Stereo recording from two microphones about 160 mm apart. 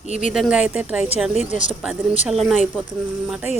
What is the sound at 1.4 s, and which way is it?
Speech, 50° left (ahead or behind).